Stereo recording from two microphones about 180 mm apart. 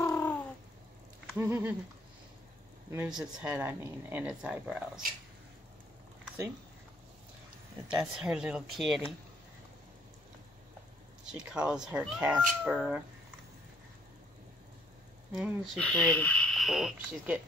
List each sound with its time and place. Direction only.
0.0 s bird: 10° left (ahead or behind)
1.4 s speech: 15° right (ahead or behind)
2.9 s speech: 5° right (ahead or behind)
7.9 s speech: 5° right (ahead or behind)
11.3 s speech: 5° right (ahead or behind)
15.3 s speech: 5° right (ahead or behind)